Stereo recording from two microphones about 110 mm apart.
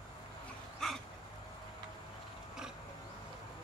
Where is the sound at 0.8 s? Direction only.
5° left (ahead or behind).